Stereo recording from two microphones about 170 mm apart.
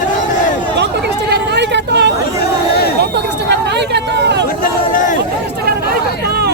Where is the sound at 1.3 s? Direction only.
85° right.